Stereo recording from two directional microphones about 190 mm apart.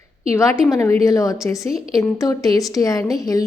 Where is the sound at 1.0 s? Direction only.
15° left (ahead or behind).